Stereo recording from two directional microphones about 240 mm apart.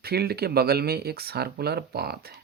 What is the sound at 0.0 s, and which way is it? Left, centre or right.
Speech, right.